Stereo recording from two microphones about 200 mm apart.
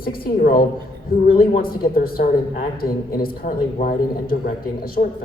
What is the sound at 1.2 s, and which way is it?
A man's voice, 45° left (ahead or behind).